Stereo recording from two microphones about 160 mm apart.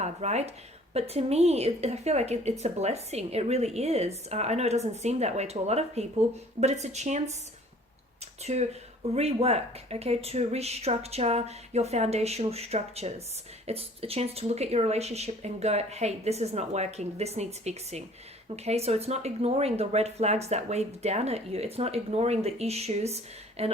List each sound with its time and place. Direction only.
0.0 s a woman's voice: 45° right (ahead or behind)
8.4 s a woman's voice: 45° right (ahead or behind)